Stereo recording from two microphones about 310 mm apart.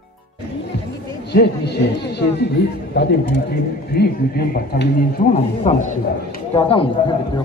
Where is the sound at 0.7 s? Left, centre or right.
Left.